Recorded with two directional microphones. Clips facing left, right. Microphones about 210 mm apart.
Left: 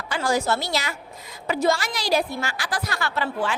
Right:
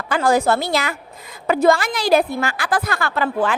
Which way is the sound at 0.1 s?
55° right (ahead or behind).